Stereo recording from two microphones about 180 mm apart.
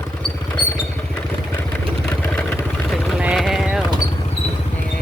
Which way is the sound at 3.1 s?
5° right (ahead or behind).